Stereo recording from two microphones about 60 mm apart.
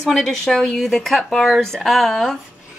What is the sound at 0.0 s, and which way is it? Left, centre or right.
Speech, centre.